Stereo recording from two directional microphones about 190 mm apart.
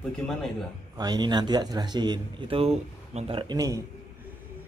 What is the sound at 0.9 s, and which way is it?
Speech, 20° right (ahead or behind).